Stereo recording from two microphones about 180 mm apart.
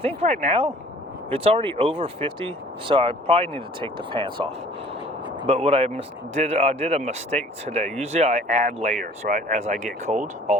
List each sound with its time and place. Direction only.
0.0 s speech: 35° right (ahead or behind)
5.5 s speech: 35° right (ahead or behind)